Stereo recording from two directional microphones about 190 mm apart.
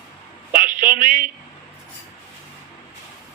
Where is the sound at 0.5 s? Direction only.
45° right (ahead or behind).